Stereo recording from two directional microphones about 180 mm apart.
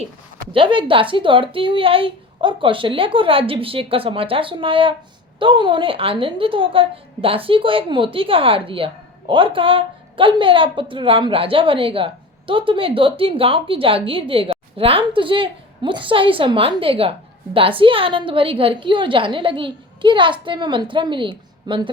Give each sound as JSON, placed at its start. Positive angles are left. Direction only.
{"t": 0.5, "sound": "a woman's voice", "side_deg": -30}